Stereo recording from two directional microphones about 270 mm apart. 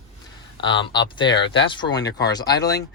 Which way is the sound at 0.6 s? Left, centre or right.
Centre.